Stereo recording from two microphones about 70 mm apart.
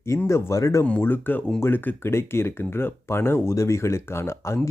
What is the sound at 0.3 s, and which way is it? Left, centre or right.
Speech, left.